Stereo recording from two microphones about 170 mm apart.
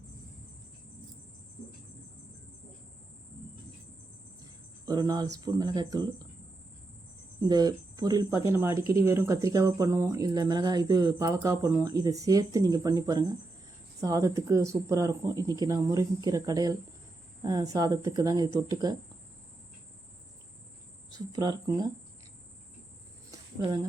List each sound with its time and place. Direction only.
4.9 s speech: 20° right (ahead or behind)
7.4 s speech: 25° right (ahead or behind)
21.3 s speech: 25° right (ahead or behind)